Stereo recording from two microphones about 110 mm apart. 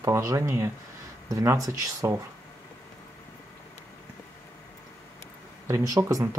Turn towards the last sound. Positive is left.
turn(degrees=-25)  # may be behind; listen again after turning